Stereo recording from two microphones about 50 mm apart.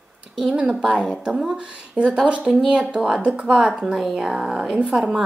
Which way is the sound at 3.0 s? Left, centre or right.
Centre.